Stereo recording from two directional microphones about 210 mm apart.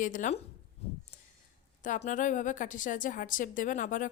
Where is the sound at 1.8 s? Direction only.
35° left (ahead or behind).